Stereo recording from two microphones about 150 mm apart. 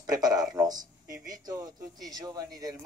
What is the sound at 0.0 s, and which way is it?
A man's voice, 25° right (ahead or behind).